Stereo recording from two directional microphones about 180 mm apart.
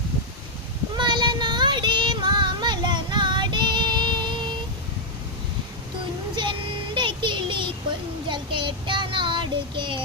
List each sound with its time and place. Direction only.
0.9 s child singing: 25° right (ahead or behind)
6.3 s child singing: 25° right (ahead or behind)